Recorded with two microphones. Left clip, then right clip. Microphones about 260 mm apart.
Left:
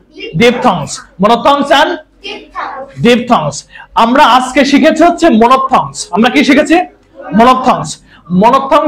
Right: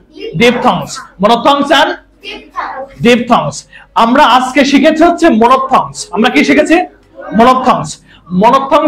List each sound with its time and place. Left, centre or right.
0.4 s a man's voice: right
3.0 s a man's voice: right